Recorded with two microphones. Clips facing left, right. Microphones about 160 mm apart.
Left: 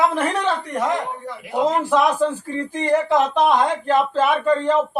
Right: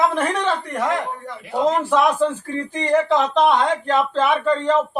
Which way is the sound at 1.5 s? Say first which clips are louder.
Even; 15° left (ahead or behind).